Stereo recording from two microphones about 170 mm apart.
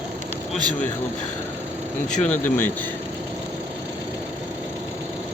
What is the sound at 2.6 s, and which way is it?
Speech, 10° left (ahead or behind).